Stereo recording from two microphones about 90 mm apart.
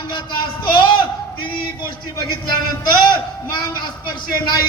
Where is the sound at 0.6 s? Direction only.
65° left (ahead or behind).